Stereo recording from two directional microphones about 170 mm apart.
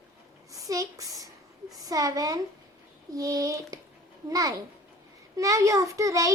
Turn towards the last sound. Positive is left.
turn(degrees=-20)  # may be behind; listen again after turning